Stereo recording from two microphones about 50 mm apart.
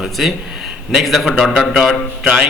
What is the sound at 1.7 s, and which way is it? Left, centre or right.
Speech, centre.